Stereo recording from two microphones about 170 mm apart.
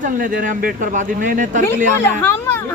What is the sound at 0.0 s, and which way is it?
Speech, 55° right (ahead or behind).